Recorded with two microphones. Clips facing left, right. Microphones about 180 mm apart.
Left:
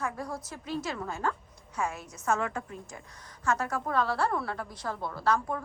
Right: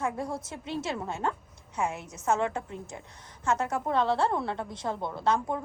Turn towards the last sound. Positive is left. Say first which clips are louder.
# right 1 dB
turn(degrees=-20)  # may be behind; listen again after turning